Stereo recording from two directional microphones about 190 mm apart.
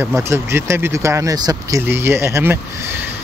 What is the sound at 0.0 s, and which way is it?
Speech, 15° right (ahead or behind).